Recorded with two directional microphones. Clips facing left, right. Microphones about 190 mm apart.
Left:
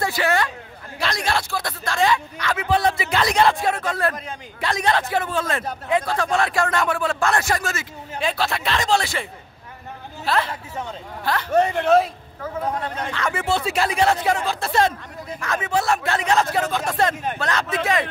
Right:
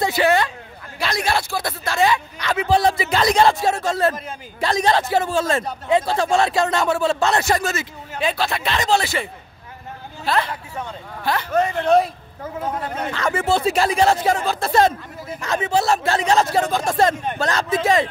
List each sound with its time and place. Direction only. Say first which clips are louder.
0.0 s hubbub: right 4 dB; 20° right (ahead or behind)
0.9 s speech: right 2 dB; 5° right (ahead or behind)
2.3 s speech: right 2 dB; 20° right (ahead or behind)
2.7 s speech: right 3 dB; 35° right (ahead or behind)
4.6 s speech: right 3 dB; 35° right (ahead or behind)
8.2 s speech: right 2 dB; centre (ahead or behind)
11.8 s speech: right 1 dB; centre (ahead or behind)
13.1 s speech: right 4 dB; 40° right (ahead or behind)
15.4 s speech: right 3 dB; 25° right (ahead or behind)